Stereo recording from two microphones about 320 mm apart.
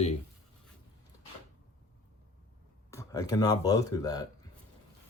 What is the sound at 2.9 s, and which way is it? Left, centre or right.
Speech, centre.